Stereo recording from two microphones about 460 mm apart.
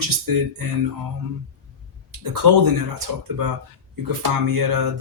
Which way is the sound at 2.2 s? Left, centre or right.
Right.